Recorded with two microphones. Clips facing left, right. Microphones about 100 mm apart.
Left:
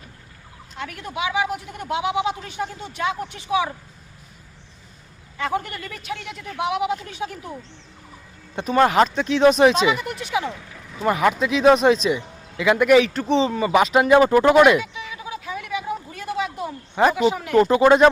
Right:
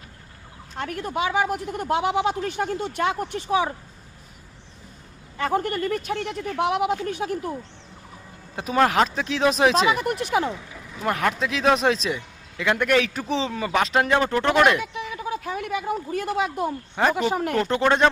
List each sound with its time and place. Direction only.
0.8 s a woman's voice: 45° right (ahead or behind)
5.4 s a woman's voice: 45° right (ahead or behind)
8.5 s speech: 5° right (ahead or behind)
10.0 s a woman's voice: 50° right (ahead or behind)
10.9 s speech: centre (ahead or behind)
15.1 s a sound: 50° right (ahead or behind)
16.9 s speech: 5° left (ahead or behind)